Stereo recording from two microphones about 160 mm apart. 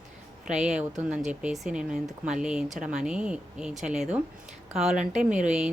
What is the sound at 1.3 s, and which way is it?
Speech, 5° right (ahead or behind).